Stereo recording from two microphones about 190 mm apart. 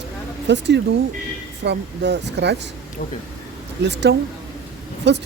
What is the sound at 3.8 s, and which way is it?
Speech, 65° right (ahead or behind).